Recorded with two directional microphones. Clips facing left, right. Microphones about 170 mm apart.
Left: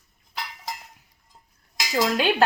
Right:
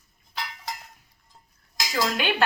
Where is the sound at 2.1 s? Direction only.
40° left (ahead or behind).